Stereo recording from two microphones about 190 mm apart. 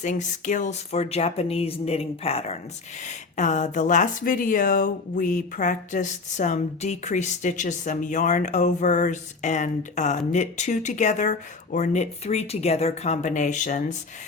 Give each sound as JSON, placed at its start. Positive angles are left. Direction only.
{"t": 0.0, "sound": "speech", "side_deg": 40}